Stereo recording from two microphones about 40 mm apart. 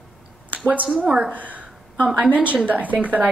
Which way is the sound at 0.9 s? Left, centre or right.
Right.